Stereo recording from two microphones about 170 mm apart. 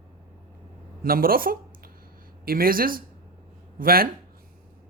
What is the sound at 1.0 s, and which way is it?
Speech, 60° right (ahead or behind).